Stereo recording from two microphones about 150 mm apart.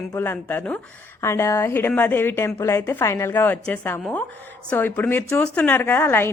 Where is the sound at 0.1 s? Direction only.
15° left (ahead or behind).